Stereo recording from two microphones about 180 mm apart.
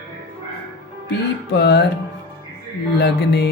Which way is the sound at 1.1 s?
70° left (ahead or behind).